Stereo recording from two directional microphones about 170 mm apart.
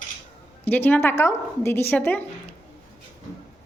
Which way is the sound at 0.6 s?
10° left (ahead or behind).